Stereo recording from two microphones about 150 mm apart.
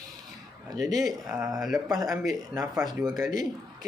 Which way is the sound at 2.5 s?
25° right (ahead or behind).